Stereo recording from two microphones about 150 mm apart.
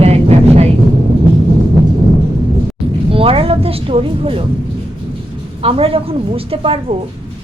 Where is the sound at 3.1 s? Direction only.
40° right (ahead or behind).